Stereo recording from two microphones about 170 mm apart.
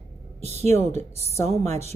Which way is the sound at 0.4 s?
40° right (ahead or behind).